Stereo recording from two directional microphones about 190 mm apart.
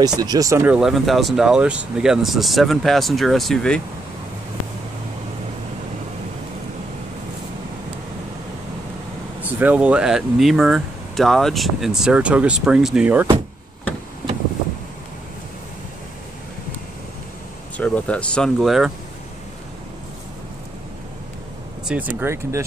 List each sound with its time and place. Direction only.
0.0 s speech: 20° right (ahead or behind)
0.7 s speech: centre (ahead or behind)
9.4 s speech: 10° right (ahead or behind)
17.7 s speech: 5° left (ahead or behind)
21.8 s speech: 10° right (ahead or behind)